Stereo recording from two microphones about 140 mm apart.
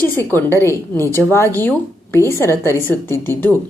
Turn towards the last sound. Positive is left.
turn(degrees=15)  # may be behind; listen again after turning